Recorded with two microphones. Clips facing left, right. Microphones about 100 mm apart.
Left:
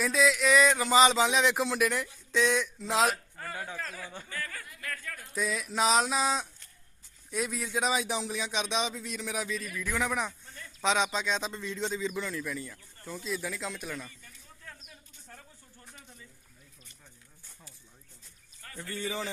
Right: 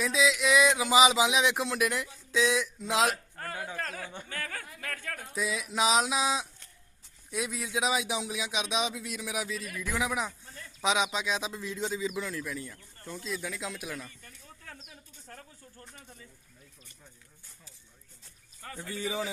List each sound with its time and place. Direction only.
0.0 s speech: centre (ahead or behind)
3.8 s speech: 60° right (ahead or behind)
4.3 s speech: 70° right (ahead or behind); by 5.2 s 90° right
5.3 s speech: centre (ahead or behind)
14.2 s a sound: 55° right (ahead or behind)
18.8 s speech: 15° right (ahead or behind)